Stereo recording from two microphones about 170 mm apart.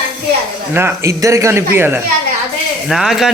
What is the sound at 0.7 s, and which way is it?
Speech, 15° right (ahead or behind).